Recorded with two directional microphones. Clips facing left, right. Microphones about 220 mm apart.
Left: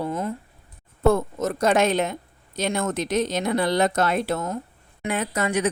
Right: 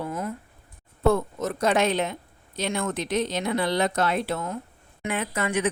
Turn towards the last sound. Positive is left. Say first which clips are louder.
# left 2 dB
turn(degrees=40)  # may be behind; listen again after turning